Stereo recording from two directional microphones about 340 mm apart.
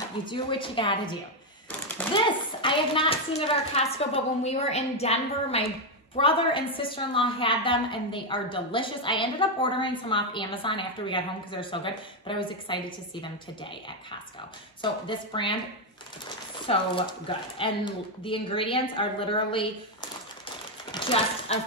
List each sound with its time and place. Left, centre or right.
0.2 s a woman's voice: centre
2.1 s a woman's voice: centre
14.8 s a woman's voice: centre
16.6 s a woman's voice: centre
20.9 s speech: centre